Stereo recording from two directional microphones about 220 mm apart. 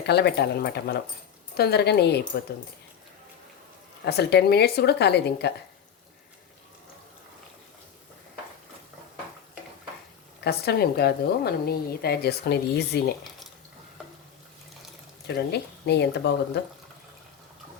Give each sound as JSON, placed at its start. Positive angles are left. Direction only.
{"t": 0.0, "sound": "a woman's voice", "side_deg": 50}
{"t": 4.0, "sound": "a woman's voice", "side_deg": 50}
{"t": 10.4, "sound": "a woman's voice", "side_deg": 45}
{"t": 15.3, "sound": "a woman's voice", "side_deg": 50}